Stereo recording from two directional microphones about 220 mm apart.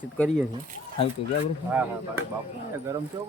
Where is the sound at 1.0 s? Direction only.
25° left (ahead or behind).